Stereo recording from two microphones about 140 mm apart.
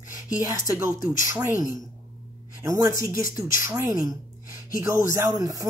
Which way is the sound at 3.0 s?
80° left.